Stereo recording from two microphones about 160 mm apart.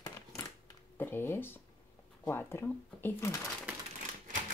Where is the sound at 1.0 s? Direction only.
15° left (ahead or behind).